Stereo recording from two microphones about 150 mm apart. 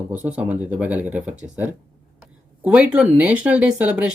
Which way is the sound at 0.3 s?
10° right (ahead or behind).